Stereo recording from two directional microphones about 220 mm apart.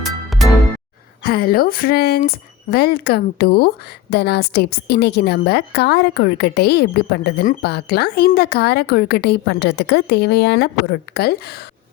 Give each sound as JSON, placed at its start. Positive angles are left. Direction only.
{"t": 0.0, "sound": "music", "side_deg": 0}
{"t": 1.2, "sound": "a woman's voice", "side_deg": 45}